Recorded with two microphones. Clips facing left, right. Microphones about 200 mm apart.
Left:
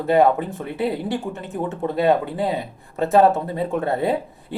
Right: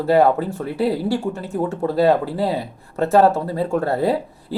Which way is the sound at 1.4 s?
Centre (ahead or behind).